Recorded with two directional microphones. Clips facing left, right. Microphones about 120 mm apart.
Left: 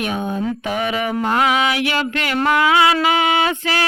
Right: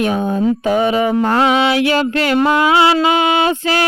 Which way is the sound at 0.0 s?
30° right (ahead or behind).